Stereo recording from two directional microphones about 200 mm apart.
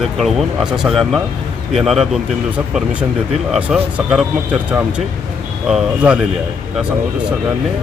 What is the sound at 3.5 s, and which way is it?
Speech, 5° right (ahead or behind).